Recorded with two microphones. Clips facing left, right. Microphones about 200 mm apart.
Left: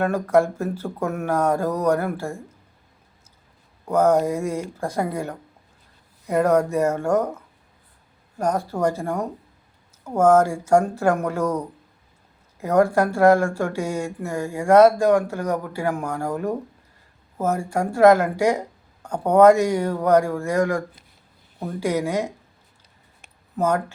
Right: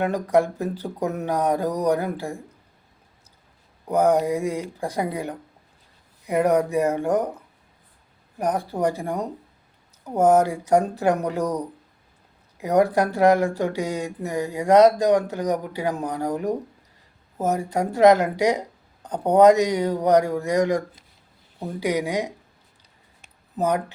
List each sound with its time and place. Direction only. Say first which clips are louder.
0.0 s speech: left 1 dB; 15° right (ahead or behind)
3.8 s speech: left 1 dB; 15° right (ahead or behind)
8.4 s speech: left 1 dB; 15° right (ahead or behind)
12.5 s speech: left 1 dB; 15° right (ahead or behind)
23.6 s speech: left 1 dB; 15° right (ahead or behind)